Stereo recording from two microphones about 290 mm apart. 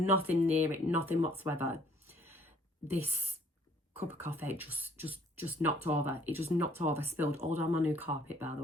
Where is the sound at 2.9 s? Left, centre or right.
Centre.